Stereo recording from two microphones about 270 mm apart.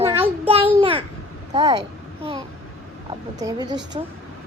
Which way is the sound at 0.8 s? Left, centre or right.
Centre.